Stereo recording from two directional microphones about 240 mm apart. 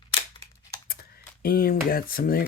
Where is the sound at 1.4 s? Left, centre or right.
Left.